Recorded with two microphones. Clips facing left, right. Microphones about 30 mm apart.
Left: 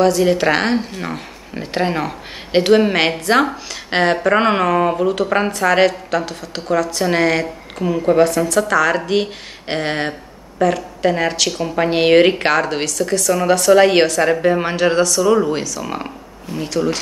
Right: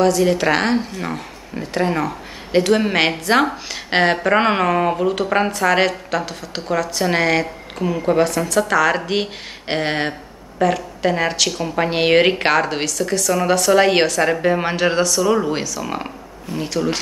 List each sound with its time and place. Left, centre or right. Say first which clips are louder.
0.0 s speech: left 2 dB; centre
1.6 s speech: even; left
2.7 s a woman's voice: left 6 dB; centre